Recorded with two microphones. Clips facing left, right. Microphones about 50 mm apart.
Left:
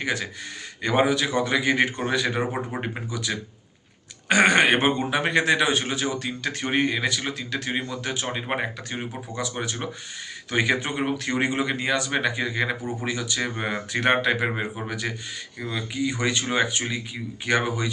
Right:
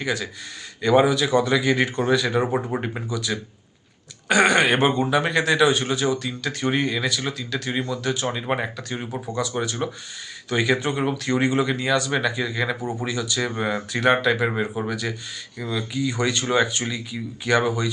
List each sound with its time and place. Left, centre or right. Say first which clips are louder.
0.0 s speech: right 1 dB; left